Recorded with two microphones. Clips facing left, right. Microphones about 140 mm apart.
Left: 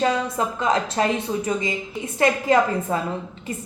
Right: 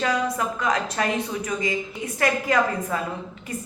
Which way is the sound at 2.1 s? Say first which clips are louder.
Left 4 dB; 25° left (ahead or behind).